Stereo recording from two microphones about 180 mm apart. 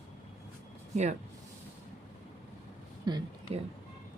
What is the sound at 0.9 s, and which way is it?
Speech, 40° right (ahead or behind).